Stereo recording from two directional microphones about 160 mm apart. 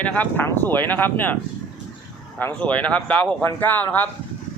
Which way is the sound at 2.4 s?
10° left (ahead or behind).